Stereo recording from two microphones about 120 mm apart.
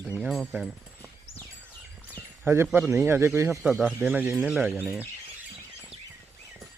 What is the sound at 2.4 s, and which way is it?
Speech, 20° right (ahead or behind).